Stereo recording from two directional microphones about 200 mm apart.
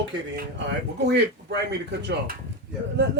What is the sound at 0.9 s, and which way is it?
Speech, 55° right (ahead or behind).